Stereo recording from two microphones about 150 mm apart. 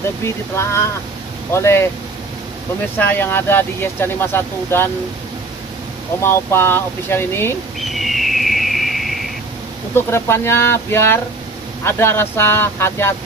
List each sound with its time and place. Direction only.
0.2 s speech: 15° left (ahead or behind)
3.0 s speech: 15° left (ahead or behind)
6.2 s speech: 15° left (ahead or behind)
7.8 s a sound: centre (ahead or behind)
9.9 s speech: 15° left (ahead or behind)